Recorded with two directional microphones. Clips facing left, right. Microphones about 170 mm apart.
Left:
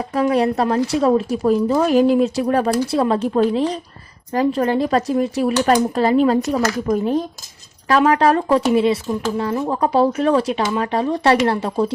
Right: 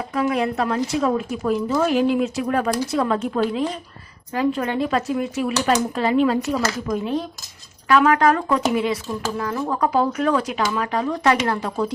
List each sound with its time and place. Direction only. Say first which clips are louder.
0.1 s speech: left 5 dB; 35° left (ahead or behind)
7.9 s speech: left 2 dB; 35° left (ahead or behind)